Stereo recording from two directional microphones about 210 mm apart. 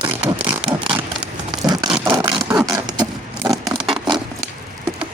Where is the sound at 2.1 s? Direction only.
20° right (ahead or behind).